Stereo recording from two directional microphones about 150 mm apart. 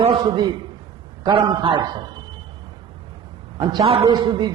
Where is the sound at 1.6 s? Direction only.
35° right (ahead or behind).